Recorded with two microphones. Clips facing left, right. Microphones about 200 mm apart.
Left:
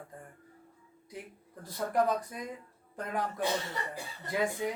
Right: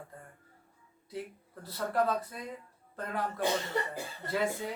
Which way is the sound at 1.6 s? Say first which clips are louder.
Left 1 dB; 15° left (ahead or behind).